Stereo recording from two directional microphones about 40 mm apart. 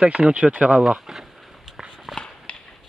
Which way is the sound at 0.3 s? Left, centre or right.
Right.